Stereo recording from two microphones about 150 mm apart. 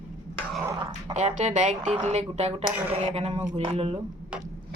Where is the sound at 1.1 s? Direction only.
50° right (ahead or behind).